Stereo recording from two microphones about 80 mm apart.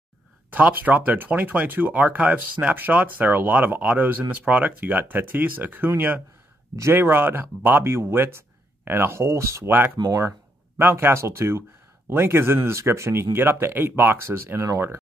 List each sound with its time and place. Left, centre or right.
0.5 s speech: right
9.7 s speech: right
9.9 s speech: right
10.8 s speech: right